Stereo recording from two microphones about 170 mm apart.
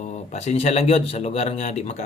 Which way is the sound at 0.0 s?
45° left (ahead or behind).